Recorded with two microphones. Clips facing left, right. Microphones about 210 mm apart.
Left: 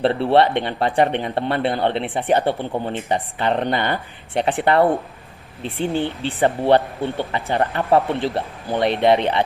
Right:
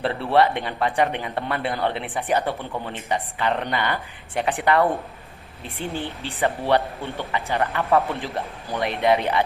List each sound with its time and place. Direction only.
0.0 s speech: 30° left (ahead or behind)